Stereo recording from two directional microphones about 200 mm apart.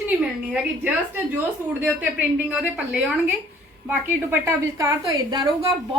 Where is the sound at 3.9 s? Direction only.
10° right (ahead or behind).